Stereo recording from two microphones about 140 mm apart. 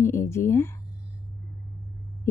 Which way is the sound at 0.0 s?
20° left (ahead or behind).